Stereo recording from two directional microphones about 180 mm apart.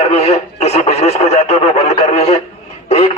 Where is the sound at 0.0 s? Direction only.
35° left (ahead or behind).